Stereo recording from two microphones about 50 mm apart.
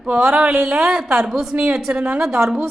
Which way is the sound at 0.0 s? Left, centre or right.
Centre.